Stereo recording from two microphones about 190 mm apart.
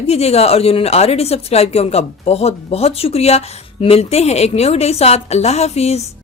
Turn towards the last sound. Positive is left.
turn(degrees=35)  # may be behind; listen again after turning